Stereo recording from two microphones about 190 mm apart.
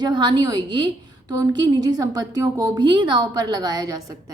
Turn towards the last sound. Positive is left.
turn(degrees=-20)  # may be behind; listen again after turning